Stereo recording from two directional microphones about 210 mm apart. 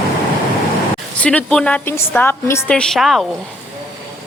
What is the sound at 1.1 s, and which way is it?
A woman's voice, 5° left (ahead or behind).